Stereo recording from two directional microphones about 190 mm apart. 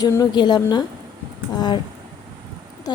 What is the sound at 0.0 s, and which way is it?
A woman's voice, 20° left (ahead or behind).